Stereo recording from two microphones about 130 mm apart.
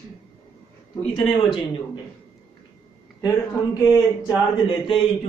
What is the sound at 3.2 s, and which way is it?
Speech, 30° left (ahead or behind).